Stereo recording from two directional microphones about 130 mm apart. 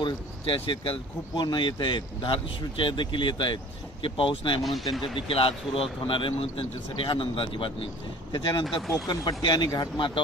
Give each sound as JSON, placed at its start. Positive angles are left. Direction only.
{"t": 0.0, "sound": "speech", "side_deg": 40}
{"t": 8.6, "sound": "speech", "side_deg": 0}
{"t": 9.0, "sound": "speech", "side_deg": 35}